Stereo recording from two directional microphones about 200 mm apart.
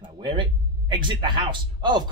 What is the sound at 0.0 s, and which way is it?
Speech, 25° right (ahead or behind).